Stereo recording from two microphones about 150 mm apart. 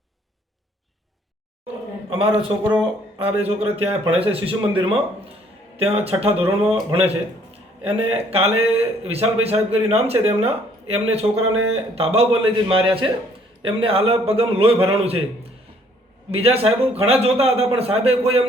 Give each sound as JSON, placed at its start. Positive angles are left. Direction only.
{"t": 1.6, "sound": "a man's voice", "side_deg": -35}
{"t": 16.3, "sound": "a man's voice", "side_deg": -40}